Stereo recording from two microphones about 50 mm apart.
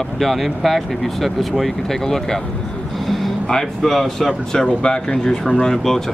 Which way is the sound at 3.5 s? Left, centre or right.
Centre.